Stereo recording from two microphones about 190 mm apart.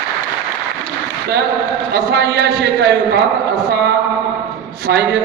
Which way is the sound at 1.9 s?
60° right (ahead or behind).